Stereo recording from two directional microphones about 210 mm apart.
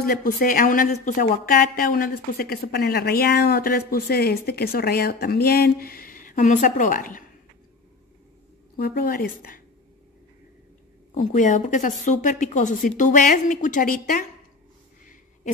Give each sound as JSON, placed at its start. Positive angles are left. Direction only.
{"t": 0.0, "sound": "a woman's voice", "side_deg": 45}
{"t": 8.7, "sound": "a woman's voice", "side_deg": 45}
{"t": 11.1, "sound": "a woman's voice", "side_deg": 35}